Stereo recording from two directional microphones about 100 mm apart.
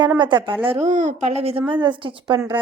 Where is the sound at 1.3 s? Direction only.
90° right.